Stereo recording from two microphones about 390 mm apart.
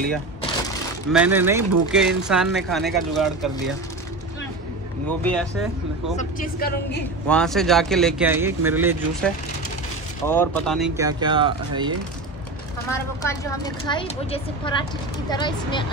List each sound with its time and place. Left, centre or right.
1.1 s speech: centre
5.2 s speech: centre
6.1 s speech: left
7.2 s speech: centre
12.9 s speech: centre